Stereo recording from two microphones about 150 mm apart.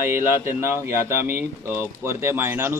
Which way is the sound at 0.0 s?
15° right (ahead or behind).